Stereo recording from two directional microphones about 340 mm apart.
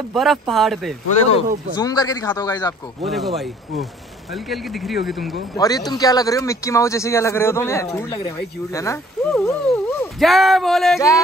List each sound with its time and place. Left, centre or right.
0.1 s speech: centre
1.8 s a man's voice: centre
3.1 s speech: centre
5.6 s a man's voice: centre